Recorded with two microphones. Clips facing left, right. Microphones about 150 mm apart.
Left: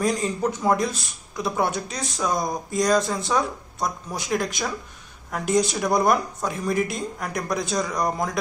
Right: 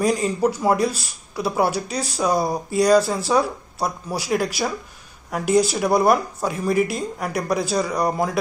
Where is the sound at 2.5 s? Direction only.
10° right (ahead or behind).